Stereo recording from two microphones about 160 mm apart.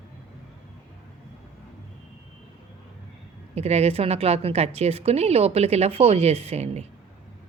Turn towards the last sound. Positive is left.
turn(degrees=-40)  # may be behind; listen again after turning